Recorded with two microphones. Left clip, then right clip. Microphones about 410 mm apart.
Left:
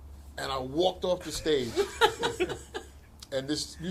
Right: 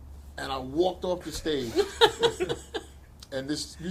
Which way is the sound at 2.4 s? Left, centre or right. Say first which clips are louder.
Right 3 dB; right.